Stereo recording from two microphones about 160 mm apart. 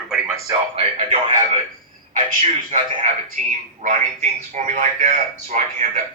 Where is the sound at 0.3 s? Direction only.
20° right (ahead or behind).